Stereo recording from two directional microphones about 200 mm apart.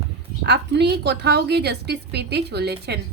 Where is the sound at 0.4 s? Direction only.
55° right (ahead or behind).